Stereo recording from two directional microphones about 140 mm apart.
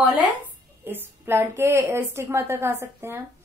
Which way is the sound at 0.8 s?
15° right (ahead or behind).